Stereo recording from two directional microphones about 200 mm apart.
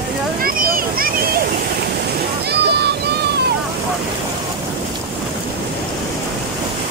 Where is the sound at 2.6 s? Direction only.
55° right (ahead or behind).